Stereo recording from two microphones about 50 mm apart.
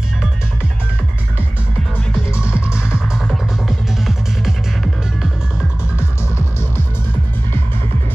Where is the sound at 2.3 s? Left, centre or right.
Right.